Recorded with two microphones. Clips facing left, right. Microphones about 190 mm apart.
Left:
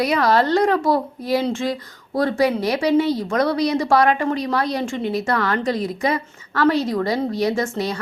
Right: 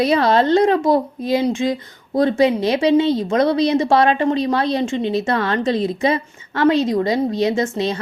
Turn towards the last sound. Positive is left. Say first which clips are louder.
# right 2 dB
turn(degrees=-20)  # may be behind; listen again after turning